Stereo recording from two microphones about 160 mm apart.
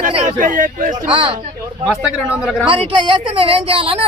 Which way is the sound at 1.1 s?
35° right (ahead or behind).